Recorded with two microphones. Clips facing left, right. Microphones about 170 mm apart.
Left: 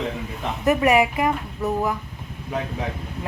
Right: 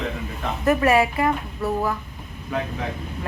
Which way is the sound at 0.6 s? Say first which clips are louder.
Even; 15° left (ahead or behind).